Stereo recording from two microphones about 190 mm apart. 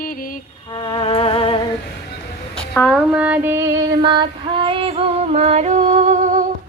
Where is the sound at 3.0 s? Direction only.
5° right (ahead or behind); by 6.5 s 40° right (ahead or behind).